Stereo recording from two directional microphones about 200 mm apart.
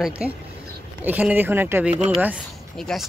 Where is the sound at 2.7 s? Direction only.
Centre (ahead or behind).